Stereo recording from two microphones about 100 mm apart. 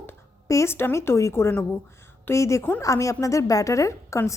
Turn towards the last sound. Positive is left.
turn(degrees=30)  # may be behind; listen again after turning